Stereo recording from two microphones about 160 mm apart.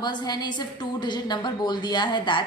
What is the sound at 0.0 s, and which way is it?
A woman's voice, 25° left (ahead or behind).